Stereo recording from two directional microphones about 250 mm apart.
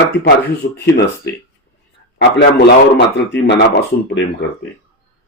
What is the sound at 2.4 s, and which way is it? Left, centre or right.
A man's voice, left.